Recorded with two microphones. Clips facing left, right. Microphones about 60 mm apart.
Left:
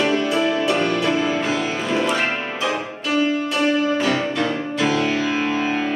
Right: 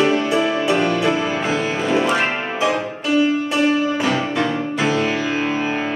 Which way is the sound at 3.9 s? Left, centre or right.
Centre.